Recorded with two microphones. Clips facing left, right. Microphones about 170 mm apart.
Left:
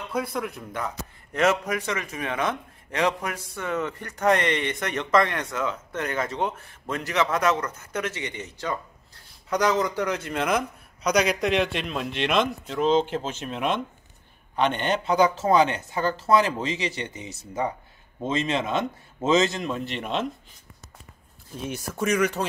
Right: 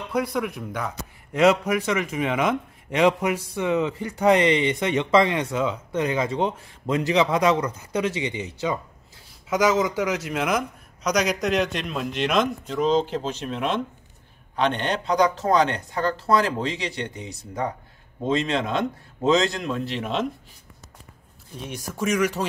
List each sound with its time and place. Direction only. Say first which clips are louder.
0.1 s a man's voice: right 4 dB; centre (ahead or behind)
21.5 s speech: left 1 dB; centre (ahead or behind)